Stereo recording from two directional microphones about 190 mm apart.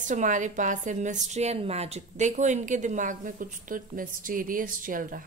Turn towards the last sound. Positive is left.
turn(degrees=-45)  # may be behind; listen again after turning